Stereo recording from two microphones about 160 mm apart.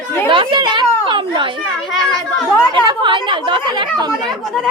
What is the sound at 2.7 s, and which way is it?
A woman's voice, 25° right (ahead or behind).